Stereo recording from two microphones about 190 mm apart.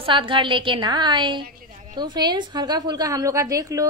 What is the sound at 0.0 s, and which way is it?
A woman's voice, 25° right (ahead or behind).